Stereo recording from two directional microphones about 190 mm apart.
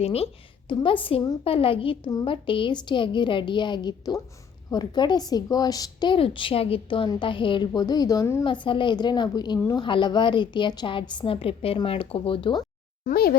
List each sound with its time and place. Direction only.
0.0 s a woman's voice: 30° left (ahead or behind)
13.1 s speech: 55° left (ahead or behind)